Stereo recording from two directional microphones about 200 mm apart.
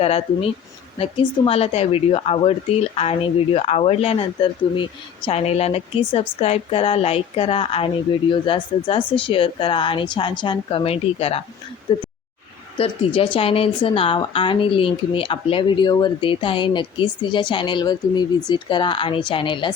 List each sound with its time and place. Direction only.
0.0 s a woman's voice: 30° left (ahead or behind)